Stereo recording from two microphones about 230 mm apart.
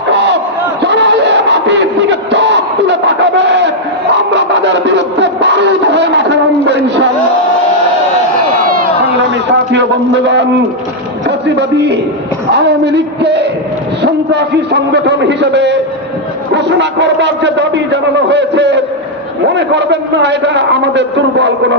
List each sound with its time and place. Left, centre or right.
0.1 s crowd: right
4.1 s a sound: right
11.3 s a man's voice: right